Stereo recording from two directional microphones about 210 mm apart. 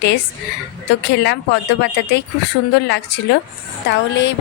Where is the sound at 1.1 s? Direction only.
55° left (ahead or behind).